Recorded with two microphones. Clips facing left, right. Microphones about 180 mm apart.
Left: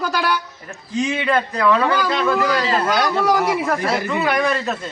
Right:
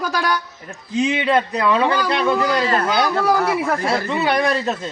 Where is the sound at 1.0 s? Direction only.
20° right (ahead or behind).